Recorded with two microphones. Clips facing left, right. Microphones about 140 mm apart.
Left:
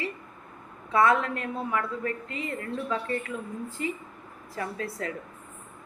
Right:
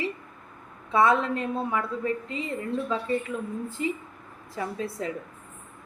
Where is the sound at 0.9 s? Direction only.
20° right (ahead or behind).